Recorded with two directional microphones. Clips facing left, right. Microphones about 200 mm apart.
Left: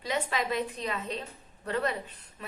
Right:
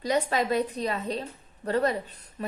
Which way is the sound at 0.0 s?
40° right (ahead or behind).